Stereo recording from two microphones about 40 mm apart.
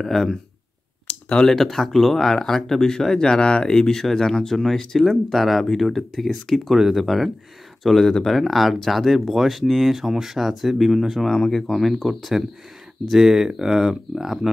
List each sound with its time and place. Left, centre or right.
0.0 s speech: centre
1.4 s speech: centre
7.8 s speech: centre
11.4 s speech: centre
11.7 s speech: centre